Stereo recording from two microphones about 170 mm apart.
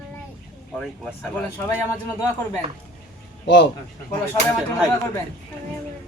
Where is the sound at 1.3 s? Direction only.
15° left (ahead or behind).